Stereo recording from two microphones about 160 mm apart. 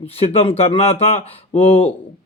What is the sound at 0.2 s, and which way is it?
Speech, 40° left (ahead or behind).